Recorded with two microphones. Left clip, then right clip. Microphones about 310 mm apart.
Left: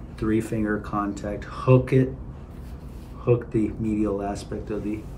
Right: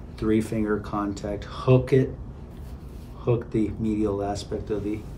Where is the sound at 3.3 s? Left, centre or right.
Centre.